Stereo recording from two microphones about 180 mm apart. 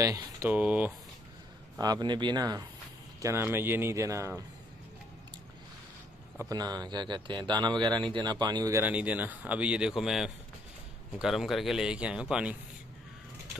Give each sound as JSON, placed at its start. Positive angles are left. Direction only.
{"t": 0.0, "sound": "speech", "side_deg": -20}
{"t": 0.5, "sound": "speech", "side_deg": -10}
{"t": 1.8, "sound": "speech", "side_deg": -25}
{"t": 6.3, "sound": "speech", "side_deg": -20}